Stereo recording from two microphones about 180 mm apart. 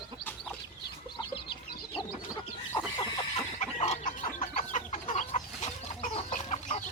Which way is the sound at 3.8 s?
40° left (ahead or behind).